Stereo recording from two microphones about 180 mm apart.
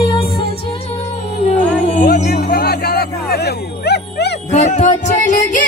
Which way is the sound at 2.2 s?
60° left (ahead or behind).